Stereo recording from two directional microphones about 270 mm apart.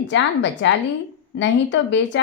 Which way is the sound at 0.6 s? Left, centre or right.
Left.